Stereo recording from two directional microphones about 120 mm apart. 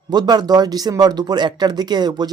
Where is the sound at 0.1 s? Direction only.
35° right (ahead or behind).